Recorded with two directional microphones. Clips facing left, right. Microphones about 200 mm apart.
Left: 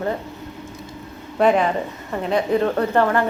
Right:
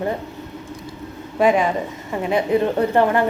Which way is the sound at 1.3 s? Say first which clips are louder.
Even; 10° right (ahead or behind).